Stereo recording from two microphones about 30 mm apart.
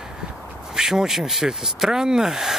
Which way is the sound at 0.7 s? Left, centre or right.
Centre.